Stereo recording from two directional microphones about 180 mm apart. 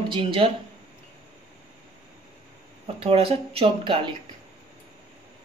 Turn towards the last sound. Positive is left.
turn(degrees=-30)  # may be behind; listen again after turning